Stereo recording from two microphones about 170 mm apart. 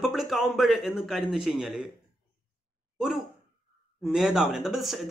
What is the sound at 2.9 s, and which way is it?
Speech, centre (ahead or behind).